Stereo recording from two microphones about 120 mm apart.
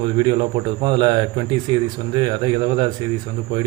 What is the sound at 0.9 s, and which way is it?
Speech, 40° right (ahead or behind).